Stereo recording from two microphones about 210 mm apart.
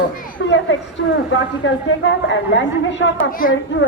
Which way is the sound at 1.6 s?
65° left (ahead or behind).